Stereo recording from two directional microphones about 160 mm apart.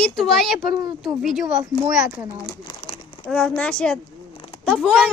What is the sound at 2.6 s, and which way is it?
Crumpling, 35° left (ahead or behind).